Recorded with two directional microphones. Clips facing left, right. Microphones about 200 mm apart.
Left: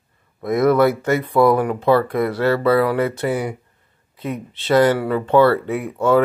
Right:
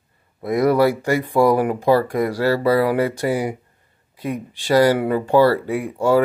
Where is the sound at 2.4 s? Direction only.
35° right (ahead or behind).